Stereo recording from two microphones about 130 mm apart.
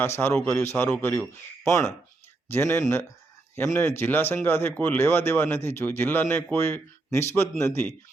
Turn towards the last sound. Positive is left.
turn(degrees=20)  # may be behind; listen again after turning